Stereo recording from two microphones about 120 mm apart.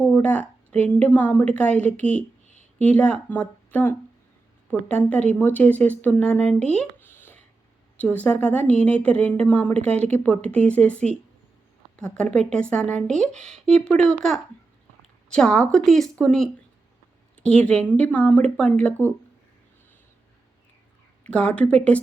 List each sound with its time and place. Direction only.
0.0 s speech: 10° left (ahead or behind)
21.2 s speech: 10° left (ahead or behind)